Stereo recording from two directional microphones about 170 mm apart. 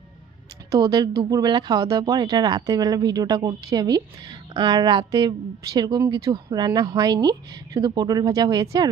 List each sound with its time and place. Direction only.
1.2 s speech: 25° right (ahead or behind)